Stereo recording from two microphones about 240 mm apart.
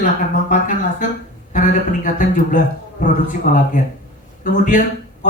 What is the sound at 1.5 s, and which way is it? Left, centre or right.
A man's voice, left.